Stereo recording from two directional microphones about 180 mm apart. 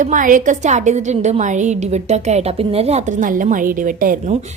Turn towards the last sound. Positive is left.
turn(degrees=-50)  # may be behind; listen again after turning